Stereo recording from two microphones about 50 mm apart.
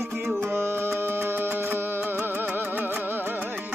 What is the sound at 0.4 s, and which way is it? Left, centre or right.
Music, right.